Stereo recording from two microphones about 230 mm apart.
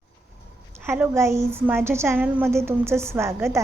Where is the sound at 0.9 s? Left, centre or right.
Centre.